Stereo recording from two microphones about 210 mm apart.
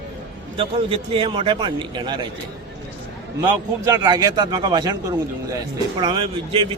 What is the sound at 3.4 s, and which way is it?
A man's voice, 15° right (ahead or behind).